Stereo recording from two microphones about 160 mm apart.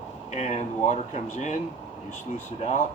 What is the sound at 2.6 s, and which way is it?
Speech, 45° left (ahead or behind).